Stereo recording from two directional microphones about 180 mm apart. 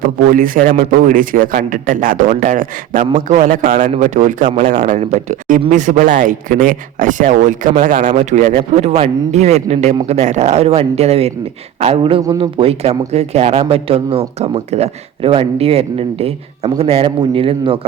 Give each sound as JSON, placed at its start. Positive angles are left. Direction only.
{"t": 0.0, "sound": "speech", "side_deg": -50}